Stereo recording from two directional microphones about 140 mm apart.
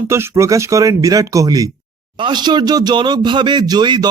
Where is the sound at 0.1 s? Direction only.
20° right (ahead or behind).